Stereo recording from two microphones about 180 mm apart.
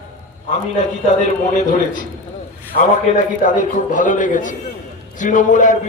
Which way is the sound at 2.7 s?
45° left (ahead or behind).